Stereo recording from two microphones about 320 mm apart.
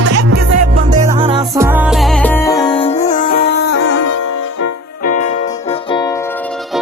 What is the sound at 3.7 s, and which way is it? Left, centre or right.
Music, left.